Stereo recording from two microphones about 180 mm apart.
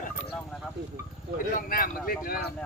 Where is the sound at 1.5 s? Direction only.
50° left (ahead or behind).